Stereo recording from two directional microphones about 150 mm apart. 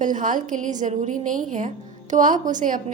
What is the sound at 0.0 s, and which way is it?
A woman's voice, 60° right (ahead or behind).